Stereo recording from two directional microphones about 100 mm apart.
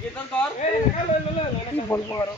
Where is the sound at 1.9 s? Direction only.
30° left (ahead or behind).